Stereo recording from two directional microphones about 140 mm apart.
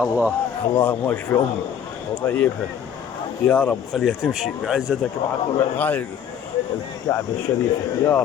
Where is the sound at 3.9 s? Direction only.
Centre (ahead or behind).